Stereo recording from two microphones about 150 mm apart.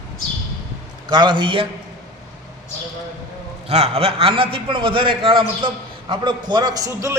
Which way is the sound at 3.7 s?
45° right (ahead or behind).